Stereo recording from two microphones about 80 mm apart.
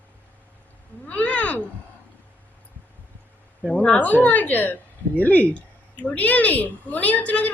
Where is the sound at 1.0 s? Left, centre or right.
Centre.